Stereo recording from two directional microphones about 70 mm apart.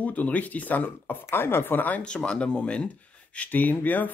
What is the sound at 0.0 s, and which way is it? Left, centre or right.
Speech, left.